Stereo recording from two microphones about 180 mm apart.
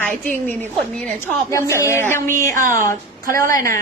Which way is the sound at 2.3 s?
45° right (ahead or behind).